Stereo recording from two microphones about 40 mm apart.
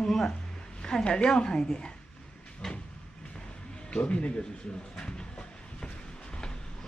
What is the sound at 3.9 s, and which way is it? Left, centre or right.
Speech, left.